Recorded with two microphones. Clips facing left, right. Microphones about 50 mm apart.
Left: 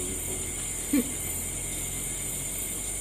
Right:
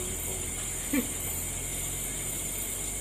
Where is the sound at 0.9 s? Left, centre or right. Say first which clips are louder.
Left 4 dB; centre.